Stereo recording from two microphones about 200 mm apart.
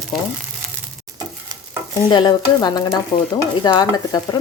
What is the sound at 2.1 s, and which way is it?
A woman's voice, 20° left (ahead or behind).